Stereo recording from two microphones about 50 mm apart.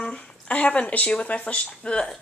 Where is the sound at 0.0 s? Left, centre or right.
Centre.